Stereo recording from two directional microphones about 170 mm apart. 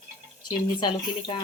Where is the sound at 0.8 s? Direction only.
30° left (ahead or behind).